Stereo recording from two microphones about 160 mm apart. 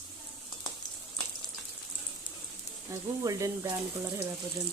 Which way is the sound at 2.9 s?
20° right (ahead or behind).